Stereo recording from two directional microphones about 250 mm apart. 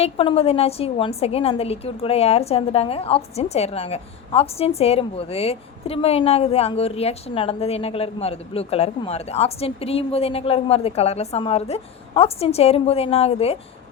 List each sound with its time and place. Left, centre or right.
0.0 s a woman's voice: left